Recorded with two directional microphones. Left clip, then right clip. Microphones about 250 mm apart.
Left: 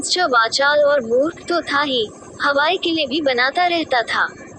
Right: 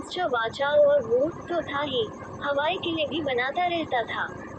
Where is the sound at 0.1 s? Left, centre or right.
Left.